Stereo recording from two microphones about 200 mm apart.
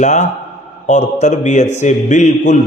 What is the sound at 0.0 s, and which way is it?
A man's voice, 35° left (ahead or behind).